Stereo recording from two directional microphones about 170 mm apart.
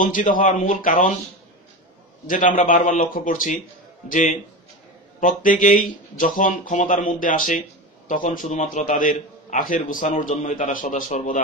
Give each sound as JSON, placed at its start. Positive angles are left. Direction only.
{"t": 0.0, "sound": "a man's voice", "side_deg": 50}
{"t": 2.2, "sound": "a man's voice", "side_deg": 50}